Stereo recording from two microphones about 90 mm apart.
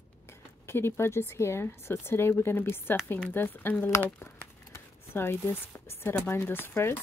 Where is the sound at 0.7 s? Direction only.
25° left (ahead or behind).